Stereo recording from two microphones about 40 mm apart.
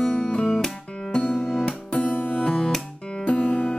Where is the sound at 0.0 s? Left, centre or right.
Left.